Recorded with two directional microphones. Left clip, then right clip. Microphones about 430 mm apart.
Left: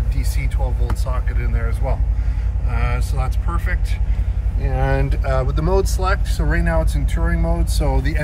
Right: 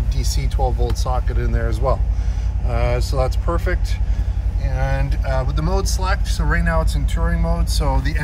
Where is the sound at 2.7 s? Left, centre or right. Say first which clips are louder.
Right 6 dB; centre.